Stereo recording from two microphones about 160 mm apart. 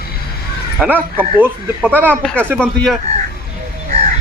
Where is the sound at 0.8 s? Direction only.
10° right (ahead or behind).